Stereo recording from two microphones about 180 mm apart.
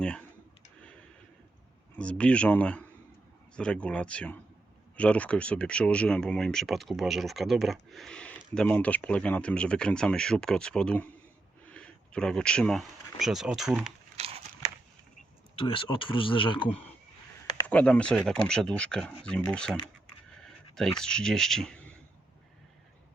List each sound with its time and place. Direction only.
2.0 s speech: 5° left (ahead or behind)
14.2 s a sound: 35° right (ahead or behind)
15.5 s speech: 30° left (ahead or behind)
17.7 s speech: 5° left (ahead or behind)